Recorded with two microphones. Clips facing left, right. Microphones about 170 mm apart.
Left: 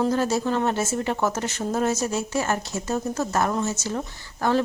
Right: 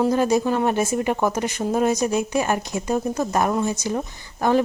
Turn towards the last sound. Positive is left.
turn(degrees=-15)  # may be behind; listen again after turning